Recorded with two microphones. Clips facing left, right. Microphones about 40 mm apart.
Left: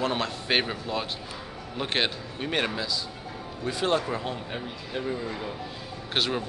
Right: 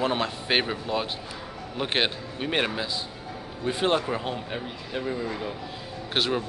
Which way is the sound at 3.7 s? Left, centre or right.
Right.